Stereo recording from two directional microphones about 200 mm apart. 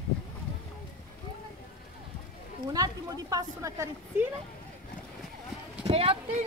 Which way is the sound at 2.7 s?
20° right (ahead or behind).